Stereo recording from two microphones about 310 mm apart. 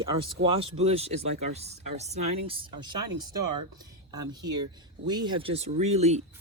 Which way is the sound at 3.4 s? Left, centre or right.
Right.